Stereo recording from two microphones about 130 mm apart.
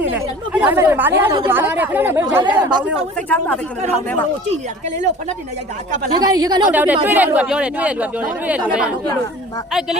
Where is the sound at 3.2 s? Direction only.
10° left (ahead or behind).